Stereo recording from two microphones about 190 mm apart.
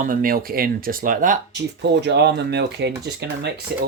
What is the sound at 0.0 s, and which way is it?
Speech, 45° right (ahead or behind).